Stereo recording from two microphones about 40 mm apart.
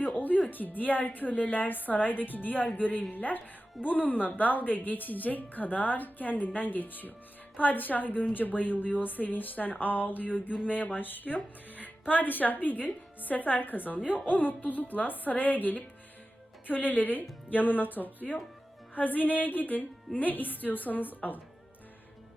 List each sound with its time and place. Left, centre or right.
0.5 s speech: left
14.0 s speech: right
14.3 s speech: left